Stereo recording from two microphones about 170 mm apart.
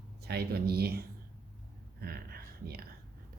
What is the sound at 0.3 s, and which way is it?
Speech, 70° right (ahead or behind).